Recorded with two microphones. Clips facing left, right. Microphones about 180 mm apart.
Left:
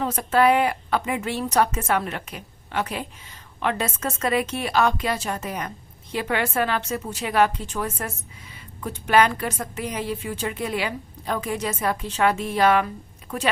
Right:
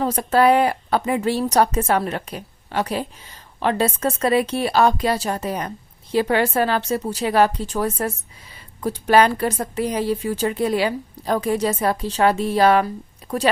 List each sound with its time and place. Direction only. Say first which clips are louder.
0.0 s a woman's voice: right 3 dB; 35° right (ahead or behind)